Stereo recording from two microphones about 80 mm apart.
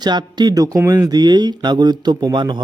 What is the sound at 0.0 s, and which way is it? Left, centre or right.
A man's voice, right.